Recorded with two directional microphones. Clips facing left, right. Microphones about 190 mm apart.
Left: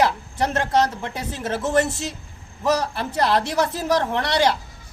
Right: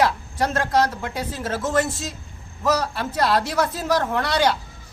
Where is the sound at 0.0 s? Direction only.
25° left (ahead or behind).